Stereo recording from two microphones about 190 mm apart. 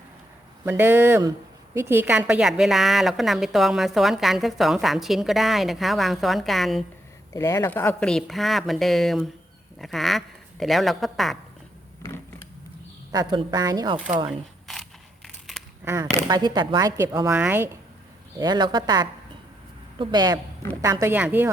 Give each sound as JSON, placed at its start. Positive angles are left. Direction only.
{"t": 0.6, "sound": "a woman's voice", "side_deg": -10}
{"t": 7.3, "sound": "a woman's voice", "side_deg": 15}
{"t": 13.1, "sound": "speech", "side_deg": -20}
{"t": 14.3, "sound": "a sound", "side_deg": 0}
{"t": 15.8, "sound": "a woman's voice", "side_deg": -15}
{"t": 18.3, "sound": "a woman's voice", "side_deg": -20}